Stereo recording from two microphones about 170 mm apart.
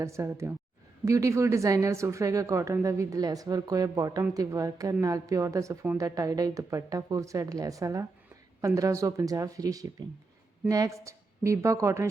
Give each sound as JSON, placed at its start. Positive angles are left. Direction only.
{"t": 0.0, "sound": "a woman's voice", "side_deg": -15}